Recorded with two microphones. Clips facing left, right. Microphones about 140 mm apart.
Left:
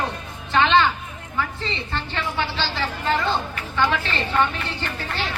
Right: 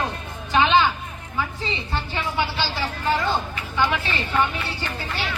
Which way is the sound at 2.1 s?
10° right (ahead or behind).